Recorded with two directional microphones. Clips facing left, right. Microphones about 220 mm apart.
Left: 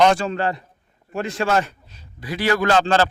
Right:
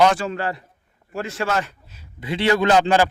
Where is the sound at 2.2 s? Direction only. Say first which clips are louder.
Right 2 dB; 25° right (ahead or behind).